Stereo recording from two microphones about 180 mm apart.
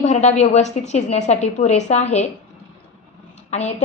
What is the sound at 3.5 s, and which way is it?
Speech, 40° left (ahead or behind).